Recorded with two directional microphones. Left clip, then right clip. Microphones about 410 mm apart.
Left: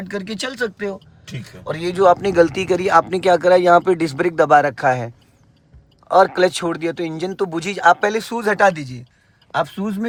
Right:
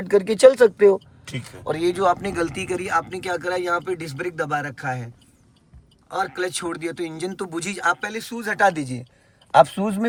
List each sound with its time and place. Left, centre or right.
0.1 s speech: centre
1.6 s speech: centre
8.7 s speech: centre